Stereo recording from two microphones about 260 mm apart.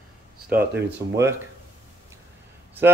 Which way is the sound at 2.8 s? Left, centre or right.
Centre.